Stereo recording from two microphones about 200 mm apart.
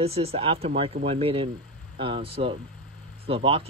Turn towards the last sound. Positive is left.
turn(degrees=-25)  # may be behind; listen again after turning